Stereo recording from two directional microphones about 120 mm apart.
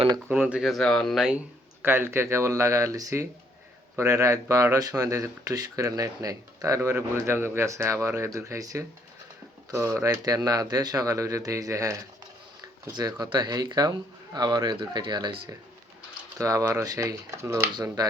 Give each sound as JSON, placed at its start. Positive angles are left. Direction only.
{"t": 0.3, "sound": "speech", "side_deg": -10}
{"t": 1.8, "sound": "speech", "side_deg": -20}
{"t": 16.4, "sound": "speech", "side_deg": -25}